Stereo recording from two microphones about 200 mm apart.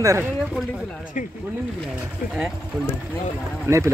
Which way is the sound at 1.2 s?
35° left (ahead or behind).